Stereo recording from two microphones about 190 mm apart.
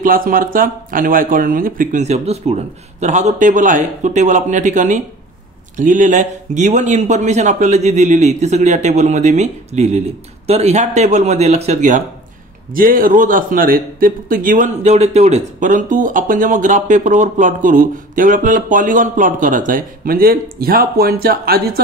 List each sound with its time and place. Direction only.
0.0 s a man's voice: 50° right (ahead or behind)